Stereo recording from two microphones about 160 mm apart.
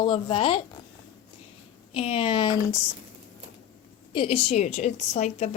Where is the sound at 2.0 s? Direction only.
35° left (ahead or behind).